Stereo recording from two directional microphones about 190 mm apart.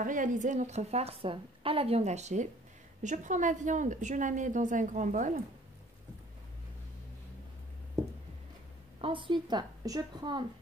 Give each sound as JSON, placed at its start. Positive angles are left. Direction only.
{"t": 0.0, "sound": "a woman's voice", "side_deg": -45}
{"t": 9.0, "sound": "a woman's voice", "side_deg": -25}